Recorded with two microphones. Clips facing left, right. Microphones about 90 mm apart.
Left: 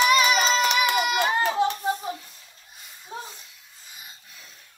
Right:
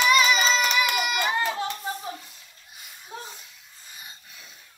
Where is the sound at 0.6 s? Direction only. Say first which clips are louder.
Left 2 dB; 25° left (ahead or behind).